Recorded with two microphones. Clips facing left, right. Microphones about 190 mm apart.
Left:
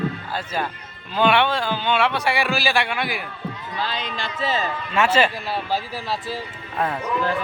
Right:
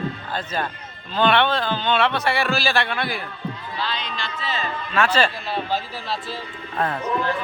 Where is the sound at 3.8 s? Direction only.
45° left (ahead or behind).